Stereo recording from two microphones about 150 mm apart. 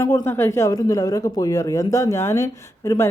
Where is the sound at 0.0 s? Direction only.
15° left (ahead or behind).